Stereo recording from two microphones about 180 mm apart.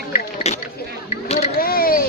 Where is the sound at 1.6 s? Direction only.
55° left (ahead or behind).